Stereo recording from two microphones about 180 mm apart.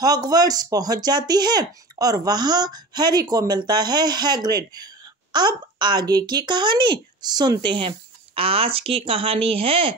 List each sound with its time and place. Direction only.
0.0 s a woman's voice: 20° right (ahead or behind)